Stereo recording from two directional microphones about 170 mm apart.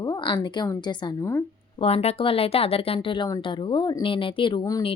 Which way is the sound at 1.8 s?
35° left (ahead or behind).